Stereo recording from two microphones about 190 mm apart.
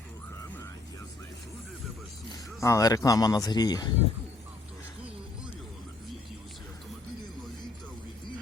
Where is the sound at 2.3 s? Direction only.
15° left (ahead or behind).